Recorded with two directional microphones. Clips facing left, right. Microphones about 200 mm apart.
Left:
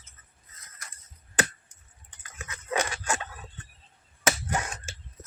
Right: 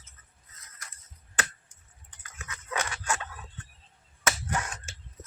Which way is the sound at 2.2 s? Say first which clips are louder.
Left 2 dB; 25° left (ahead or behind).